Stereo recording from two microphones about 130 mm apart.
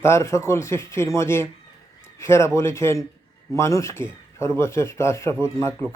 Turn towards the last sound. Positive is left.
turn(degrees=20)  # may be behind; listen again after turning